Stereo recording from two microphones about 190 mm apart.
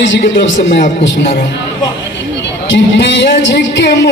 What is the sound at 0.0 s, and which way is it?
Speech, 65° left (ahead or behind).